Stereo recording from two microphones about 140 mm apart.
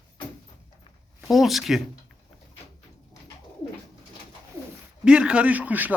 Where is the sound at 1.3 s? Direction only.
Centre (ahead or behind).